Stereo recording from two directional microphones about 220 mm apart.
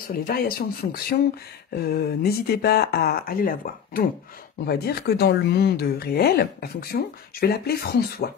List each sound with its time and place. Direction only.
0.0 s speech: 40° left (ahead or behind)